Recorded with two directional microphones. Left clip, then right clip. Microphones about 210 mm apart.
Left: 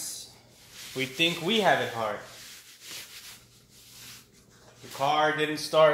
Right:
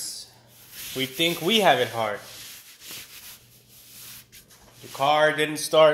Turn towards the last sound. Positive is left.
turn(degrees=-35)  # may be behind; listen again after turning